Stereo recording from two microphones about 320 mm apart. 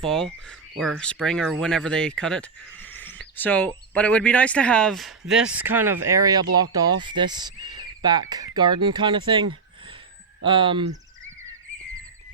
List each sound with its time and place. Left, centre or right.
0.0 s speech: centre